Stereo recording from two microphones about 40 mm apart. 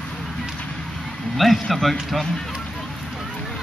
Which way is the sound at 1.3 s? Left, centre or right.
Centre.